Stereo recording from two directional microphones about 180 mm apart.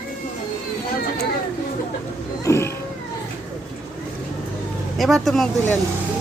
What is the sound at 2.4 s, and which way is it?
Cat, 15° left (ahead or behind).